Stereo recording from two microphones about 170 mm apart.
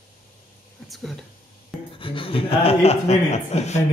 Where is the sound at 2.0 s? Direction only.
30° left (ahead or behind).